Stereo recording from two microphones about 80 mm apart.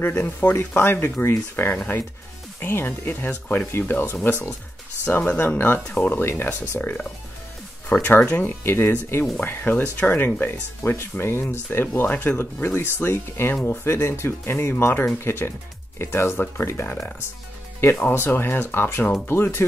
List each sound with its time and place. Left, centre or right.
0.0 s speech: left
6.2 s speech: left
6.8 s speech: centre
18.1 s speech: left